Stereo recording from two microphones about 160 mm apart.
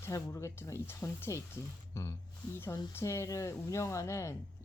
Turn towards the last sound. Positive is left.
turn(degrees=15)  # may be behind; listen again after turning